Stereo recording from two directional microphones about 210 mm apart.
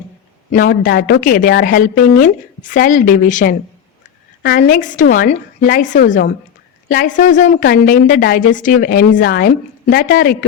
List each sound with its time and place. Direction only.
0.5 s a woman's voice: 40° left (ahead or behind)